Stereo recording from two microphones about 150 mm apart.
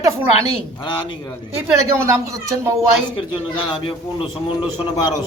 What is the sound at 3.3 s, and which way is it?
Speech, 35° left (ahead or behind).